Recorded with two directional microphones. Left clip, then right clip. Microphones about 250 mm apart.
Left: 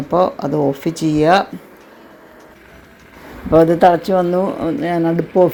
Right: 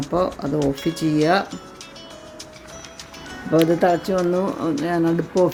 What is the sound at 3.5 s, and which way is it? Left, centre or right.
Speech, centre.